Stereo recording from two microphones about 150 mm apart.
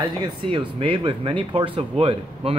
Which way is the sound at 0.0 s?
30° right (ahead or behind).